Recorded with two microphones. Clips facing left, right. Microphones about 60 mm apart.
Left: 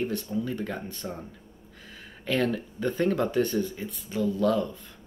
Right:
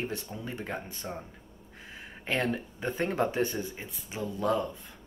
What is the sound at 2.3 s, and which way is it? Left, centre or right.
Speech, right.